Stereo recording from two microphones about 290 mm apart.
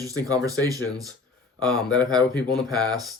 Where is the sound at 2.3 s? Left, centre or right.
Centre.